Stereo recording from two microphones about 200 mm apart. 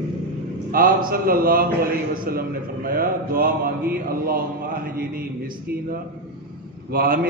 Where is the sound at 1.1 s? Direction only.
45° right (ahead or behind).